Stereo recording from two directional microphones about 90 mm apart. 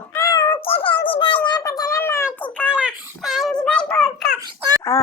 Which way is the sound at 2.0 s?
30° left (ahead or behind).